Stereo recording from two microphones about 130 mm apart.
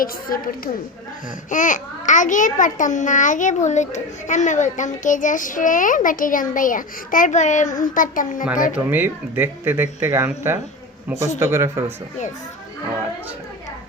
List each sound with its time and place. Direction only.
0.0 s a woman's voice: 90° left
1.5 s a child's voice: 80° left
8.9 s speech: 15° right (ahead or behind)